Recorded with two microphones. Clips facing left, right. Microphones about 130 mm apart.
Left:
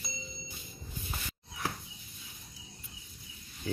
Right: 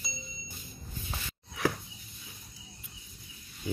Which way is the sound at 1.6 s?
80° right.